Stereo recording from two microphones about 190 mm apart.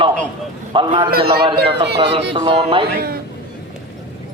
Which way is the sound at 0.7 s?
25° right (ahead or behind).